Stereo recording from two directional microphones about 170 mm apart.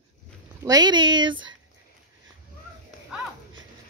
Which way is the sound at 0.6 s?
20° right (ahead or behind).